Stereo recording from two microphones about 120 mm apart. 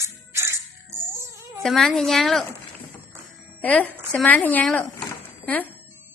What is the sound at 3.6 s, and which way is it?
A woman's voice, 10° left (ahead or behind).